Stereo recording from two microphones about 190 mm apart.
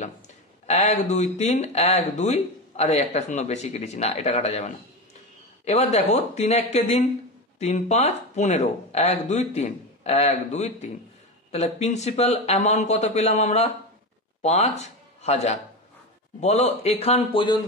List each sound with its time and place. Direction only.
0.7 s speech: 35° left (ahead or behind)
5.7 s speech: 35° left (ahead or behind)